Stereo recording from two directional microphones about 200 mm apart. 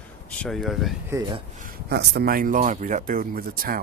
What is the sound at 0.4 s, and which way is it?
Speech, centre (ahead or behind).